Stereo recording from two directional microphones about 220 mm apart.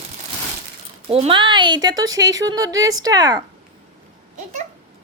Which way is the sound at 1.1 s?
25° right (ahead or behind).